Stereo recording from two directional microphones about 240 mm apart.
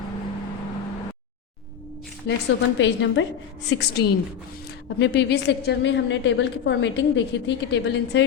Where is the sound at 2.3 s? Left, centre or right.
Left.